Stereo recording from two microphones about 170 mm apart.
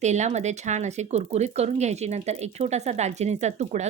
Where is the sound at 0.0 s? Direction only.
45° right (ahead or behind).